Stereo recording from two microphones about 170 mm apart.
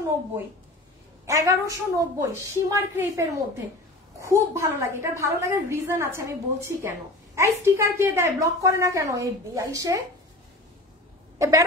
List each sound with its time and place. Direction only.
1.2 s a woman's voice: 20° right (ahead or behind)
11.3 s a woman's voice: 20° right (ahead or behind)